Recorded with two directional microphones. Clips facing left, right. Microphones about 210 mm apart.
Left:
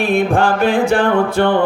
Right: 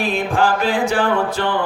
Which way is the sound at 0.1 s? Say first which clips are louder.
Left 4 dB; 55° left (ahead or behind).